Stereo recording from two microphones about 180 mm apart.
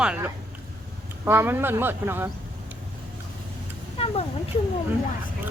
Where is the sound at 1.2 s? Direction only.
10° right (ahead or behind).